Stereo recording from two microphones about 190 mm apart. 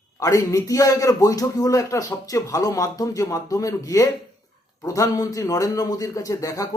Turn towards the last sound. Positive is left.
turn(degrees=20)  # may be behind; listen again after turning